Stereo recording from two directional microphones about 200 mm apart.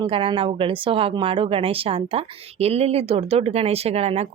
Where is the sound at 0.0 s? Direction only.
25° right (ahead or behind).